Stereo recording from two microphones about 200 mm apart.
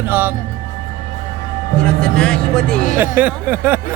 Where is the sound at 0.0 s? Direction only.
10° right (ahead or behind).